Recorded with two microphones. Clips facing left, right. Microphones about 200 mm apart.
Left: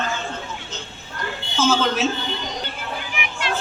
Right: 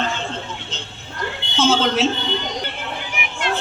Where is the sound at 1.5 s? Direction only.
30° right (ahead or behind).